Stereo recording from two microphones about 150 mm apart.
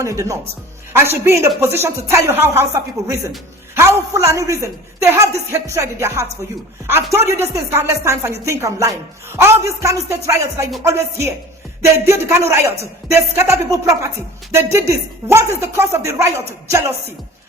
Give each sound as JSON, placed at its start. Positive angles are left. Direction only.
{"t": 0.0, "sound": "a woman's voice", "side_deg": -20}